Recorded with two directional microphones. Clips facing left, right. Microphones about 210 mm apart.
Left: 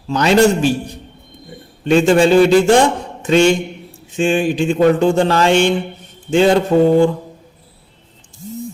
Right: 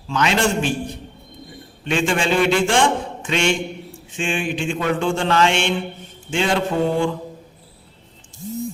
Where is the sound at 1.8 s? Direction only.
40° left (ahead or behind).